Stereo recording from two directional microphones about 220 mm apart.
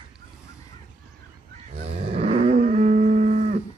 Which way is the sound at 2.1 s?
30° right (ahead or behind).